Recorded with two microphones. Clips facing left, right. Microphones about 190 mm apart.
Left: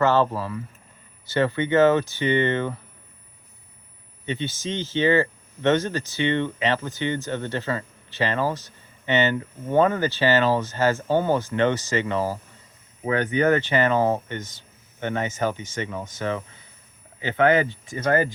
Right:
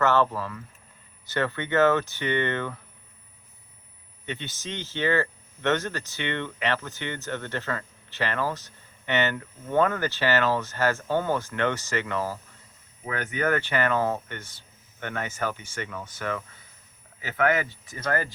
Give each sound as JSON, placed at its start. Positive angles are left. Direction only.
{"t": 0.0, "sound": "speech", "side_deg": 15}
{"t": 4.3, "sound": "speech", "side_deg": 15}
{"t": 13.1, "sound": "speech", "side_deg": 30}